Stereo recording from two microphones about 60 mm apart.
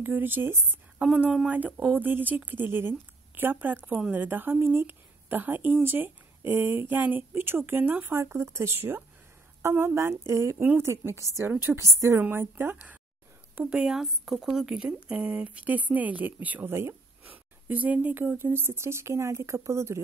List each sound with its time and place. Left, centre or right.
0.0 s speech: right
1.0 s speech: centre
1.5 s a woman's voice: right
11.7 s speech: centre
12.2 s speech: right
13.8 s speech: centre; by 16.6 s right
16.6 s speech: right
17.2 s speech: right